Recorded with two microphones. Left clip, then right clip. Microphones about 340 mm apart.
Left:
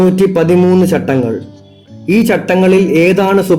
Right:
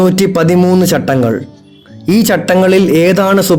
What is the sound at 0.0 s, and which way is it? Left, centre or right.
A man's voice, right.